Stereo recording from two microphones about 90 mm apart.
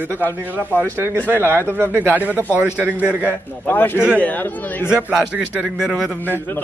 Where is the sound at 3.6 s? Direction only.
25° left (ahead or behind).